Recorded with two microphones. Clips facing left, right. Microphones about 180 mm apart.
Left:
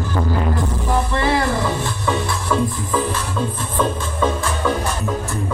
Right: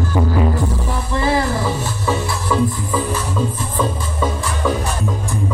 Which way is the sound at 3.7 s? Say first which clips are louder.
Left 3 dB; 10° right (ahead or behind).